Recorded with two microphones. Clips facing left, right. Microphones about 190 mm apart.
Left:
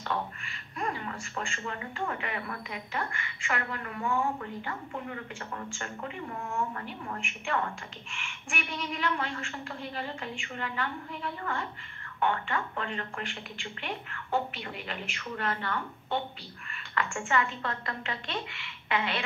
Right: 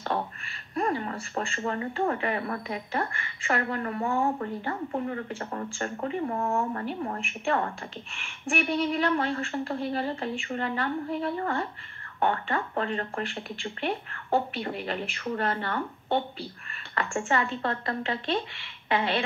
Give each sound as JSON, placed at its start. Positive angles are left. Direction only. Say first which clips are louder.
{"t": 0.7, "sound": "speech", "louder": "right 6 dB", "side_deg": -35}